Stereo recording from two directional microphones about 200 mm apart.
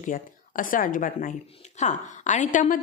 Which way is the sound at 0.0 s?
45° left (ahead or behind).